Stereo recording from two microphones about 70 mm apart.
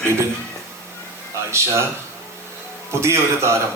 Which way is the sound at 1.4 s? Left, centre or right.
Right.